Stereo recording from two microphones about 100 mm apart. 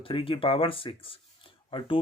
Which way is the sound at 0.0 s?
65° left (ahead or behind).